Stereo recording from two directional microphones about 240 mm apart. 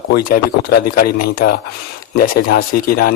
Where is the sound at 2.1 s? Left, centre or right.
Left.